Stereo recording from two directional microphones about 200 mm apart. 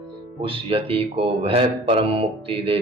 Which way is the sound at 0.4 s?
25° right (ahead or behind).